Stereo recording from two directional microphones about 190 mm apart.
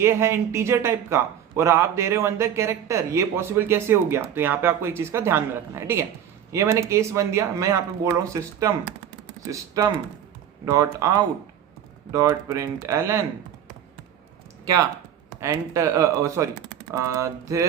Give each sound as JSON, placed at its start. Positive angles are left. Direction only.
{"t": 0.0, "sound": "a man's voice", "side_deg": -15}
{"t": 14.6, "sound": "a sound", "side_deg": -15}
{"t": 15.4, "sound": "a man's voice", "side_deg": -15}